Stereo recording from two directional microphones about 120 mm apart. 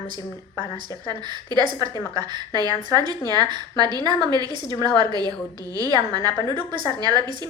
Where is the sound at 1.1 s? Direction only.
35° right (ahead or behind).